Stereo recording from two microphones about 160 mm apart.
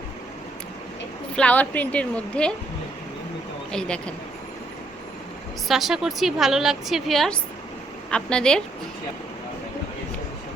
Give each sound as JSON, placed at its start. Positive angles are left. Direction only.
{"t": 1.4, "sound": "speech", "side_deg": 10}
{"t": 3.7, "sound": "a woman's voice", "side_deg": 5}
{"t": 5.6, "sound": "a woman's voice", "side_deg": 0}